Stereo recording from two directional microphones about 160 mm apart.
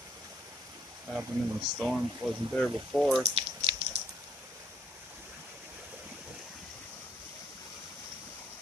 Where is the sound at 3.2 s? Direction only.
40° right (ahead or behind).